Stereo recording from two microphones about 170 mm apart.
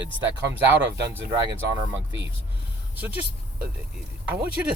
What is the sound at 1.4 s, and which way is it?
Speech, 25° right (ahead or behind).